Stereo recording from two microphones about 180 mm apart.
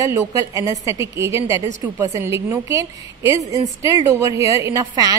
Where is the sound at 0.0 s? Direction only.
20° right (ahead or behind).